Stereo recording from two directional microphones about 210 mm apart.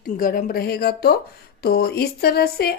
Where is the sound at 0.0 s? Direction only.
40° left (ahead or behind).